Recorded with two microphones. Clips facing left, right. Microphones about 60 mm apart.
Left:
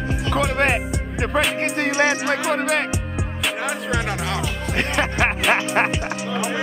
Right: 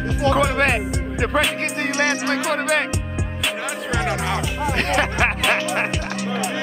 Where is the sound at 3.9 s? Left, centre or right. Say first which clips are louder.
Right 5 dB; centre.